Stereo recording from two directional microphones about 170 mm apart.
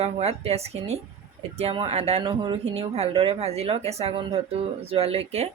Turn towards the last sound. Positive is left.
turn(degrees=-35)  # may be behind; listen again after turning